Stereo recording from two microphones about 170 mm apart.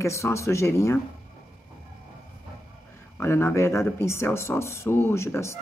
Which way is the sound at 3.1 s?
15° left (ahead or behind).